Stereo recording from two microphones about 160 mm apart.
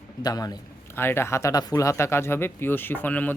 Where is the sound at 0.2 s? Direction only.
25° left (ahead or behind).